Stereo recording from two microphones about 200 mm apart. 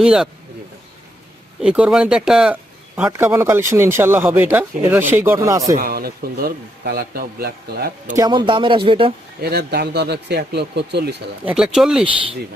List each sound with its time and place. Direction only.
0.0 s speech: 5° right (ahead or behind)
1.6 s speech: 5° right (ahead or behind)
5.7 s speech: 45° right (ahead or behind)
8.1 s speech: 20° right (ahead or behind)
9.4 s speech: 55° right (ahead or behind)
11.4 s speech: 5° right (ahead or behind)